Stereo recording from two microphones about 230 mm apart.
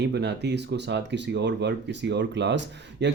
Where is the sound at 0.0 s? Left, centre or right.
Right.